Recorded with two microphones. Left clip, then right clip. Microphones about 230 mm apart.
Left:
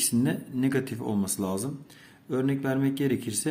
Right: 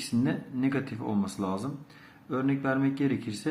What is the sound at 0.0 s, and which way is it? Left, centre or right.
Speech, left.